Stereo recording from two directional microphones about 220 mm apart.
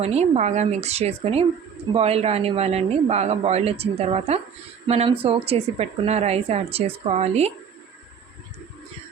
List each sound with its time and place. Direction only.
0.0 s a woman's voice: 30° right (ahead or behind)